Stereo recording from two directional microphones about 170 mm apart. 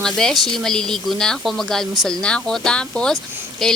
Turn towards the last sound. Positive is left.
turn(degrees=5)  # may be behind; listen again after turning